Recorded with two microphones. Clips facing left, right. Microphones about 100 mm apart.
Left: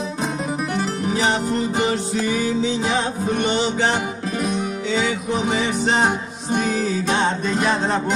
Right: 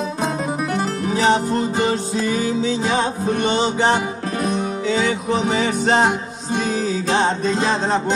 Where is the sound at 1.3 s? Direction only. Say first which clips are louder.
Right 3 dB; 30° right (ahead or behind).